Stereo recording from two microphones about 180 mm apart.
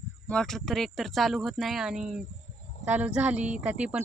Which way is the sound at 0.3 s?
5° left (ahead or behind).